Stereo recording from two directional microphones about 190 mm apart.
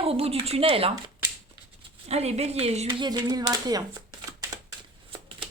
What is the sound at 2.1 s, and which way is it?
Speech, 35° right (ahead or behind).